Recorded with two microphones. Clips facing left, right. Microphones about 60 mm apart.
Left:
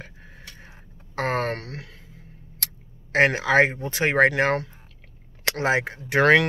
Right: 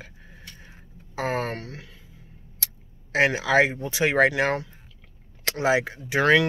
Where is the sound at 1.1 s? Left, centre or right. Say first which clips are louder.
Left 2 dB; left.